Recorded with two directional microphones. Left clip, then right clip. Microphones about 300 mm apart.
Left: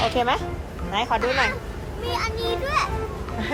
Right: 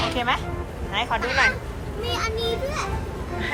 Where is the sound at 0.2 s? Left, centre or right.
Centre.